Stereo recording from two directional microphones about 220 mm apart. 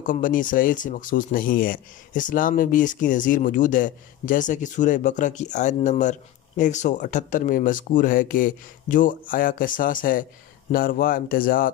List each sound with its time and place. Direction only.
0.0 s speech: 35° left (ahead or behind)